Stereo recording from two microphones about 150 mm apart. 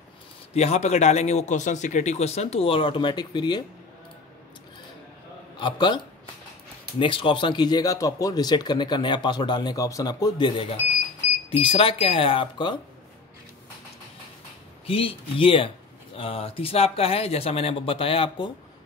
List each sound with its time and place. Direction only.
0.6 s a man's voice: 45° left (ahead or behind); by 3.6 s 30° left (ahead or behind)
5.6 s speech: 30° left (ahead or behind)
7.0 s speech: 35° left (ahead or behind)
14.9 s speech: 40° left (ahead or behind)